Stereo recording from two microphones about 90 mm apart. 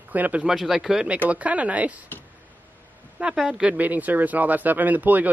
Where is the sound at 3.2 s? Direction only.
10° right (ahead or behind).